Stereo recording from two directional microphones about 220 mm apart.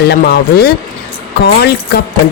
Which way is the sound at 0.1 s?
45° left (ahead or behind).